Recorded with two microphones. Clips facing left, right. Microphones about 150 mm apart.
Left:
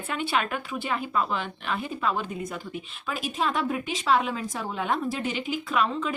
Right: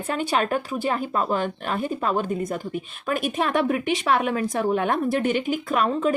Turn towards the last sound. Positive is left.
turn(degrees=-45)  # may be behind; listen again after turning